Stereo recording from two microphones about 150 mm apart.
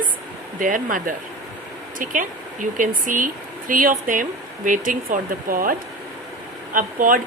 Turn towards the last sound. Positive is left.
turn(degrees=-65)  # may be behind; listen again after turning